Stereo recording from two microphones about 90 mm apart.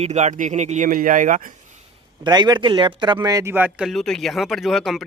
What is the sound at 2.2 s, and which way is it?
Speech, 50° right (ahead or behind).